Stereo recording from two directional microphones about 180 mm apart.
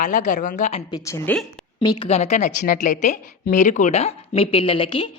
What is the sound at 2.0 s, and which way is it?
A woman's voice, 35° left (ahead or behind).